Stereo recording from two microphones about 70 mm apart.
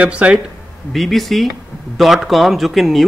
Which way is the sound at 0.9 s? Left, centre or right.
Centre.